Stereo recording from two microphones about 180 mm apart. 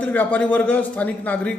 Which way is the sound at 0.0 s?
10° left (ahead or behind).